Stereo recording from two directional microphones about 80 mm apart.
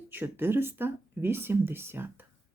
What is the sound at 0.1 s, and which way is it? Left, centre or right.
Speech, right.